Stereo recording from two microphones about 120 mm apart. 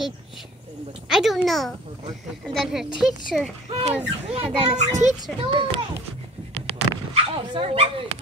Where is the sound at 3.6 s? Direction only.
65° right (ahead or behind).